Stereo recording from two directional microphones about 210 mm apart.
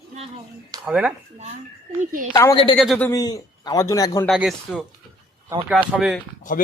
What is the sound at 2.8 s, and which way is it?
A man's voice, 5° left (ahead or behind).